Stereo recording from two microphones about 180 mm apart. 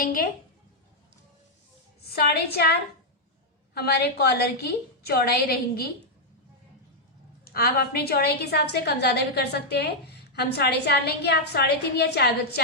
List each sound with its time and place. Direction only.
0.0 s a woman's voice: 55° left (ahead or behind)
2.1 s a woman's voice: 60° left (ahead or behind)
3.8 s a woman's voice: 60° left (ahead or behind)
7.4 s a woman's voice: 60° left (ahead or behind)